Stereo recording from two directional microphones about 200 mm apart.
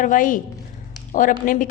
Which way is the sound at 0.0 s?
40° left (ahead or behind).